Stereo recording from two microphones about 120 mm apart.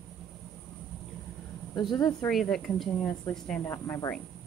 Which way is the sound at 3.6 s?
25° left (ahead or behind).